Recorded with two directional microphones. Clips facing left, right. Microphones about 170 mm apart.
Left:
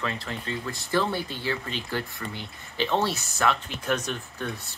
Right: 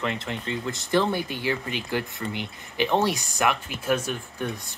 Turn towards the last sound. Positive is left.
turn(degrees=-15)  # may be behind; listen again after turning